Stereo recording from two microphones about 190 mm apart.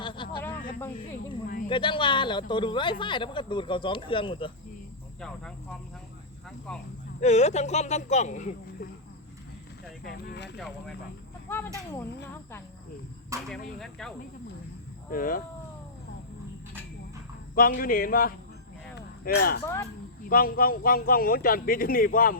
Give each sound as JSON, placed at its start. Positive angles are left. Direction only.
{"t": 0.0, "sound": "a sound", "side_deg": 25}
{"t": 1.6, "sound": "speech", "side_deg": 25}
{"t": 6.7, "sound": "speech", "side_deg": 5}
{"t": 7.2, "sound": "speech", "side_deg": 35}
{"t": 10.0, "sound": "speech", "side_deg": 55}
{"t": 11.4, "sound": "speech", "side_deg": 10}
{"t": 13.3, "sound": "speech", "side_deg": -15}
{"t": 13.7, "sound": "speech", "side_deg": 0}
{"t": 15.1, "sound": "a man's voice", "side_deg": 50}
{"t": 17.5, "sound": "a man's voice", "side_deg": 50}
{"t": 18.9, "sound": "a sound", "side_deg": 55}
{"t": 19.6, "sound": "speech", "side_deg": 15}
{"t": 20.2, "sound": "a man's voice", "side_deg": 50}